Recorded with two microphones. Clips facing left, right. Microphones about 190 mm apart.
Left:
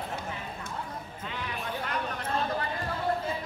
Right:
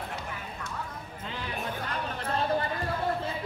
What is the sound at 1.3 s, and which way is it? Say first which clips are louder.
Music: right 1 dB; 35° right (ahead or behind).